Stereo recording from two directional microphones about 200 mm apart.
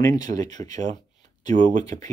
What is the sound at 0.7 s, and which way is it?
Speech, 35° right (ahead or behind).